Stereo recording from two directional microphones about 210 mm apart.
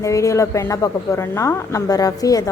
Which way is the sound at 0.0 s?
15° left (ahead or behind).